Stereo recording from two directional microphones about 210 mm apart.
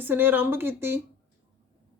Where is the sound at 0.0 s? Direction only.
10° right (ahead or behind).